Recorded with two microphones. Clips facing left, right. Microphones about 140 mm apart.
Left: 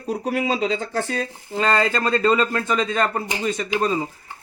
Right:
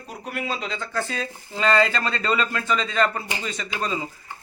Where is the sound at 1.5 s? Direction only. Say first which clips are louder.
Left 1 dB; 25° left (ahead or behind).